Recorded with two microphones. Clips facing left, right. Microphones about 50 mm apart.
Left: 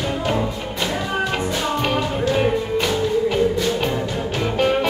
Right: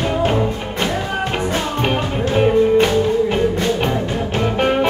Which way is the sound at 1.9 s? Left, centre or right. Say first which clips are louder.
Right 1 dB; right.